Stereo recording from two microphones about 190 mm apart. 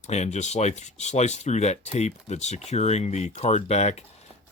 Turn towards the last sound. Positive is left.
turn(degrees=35)  # may be behind; listen again after turning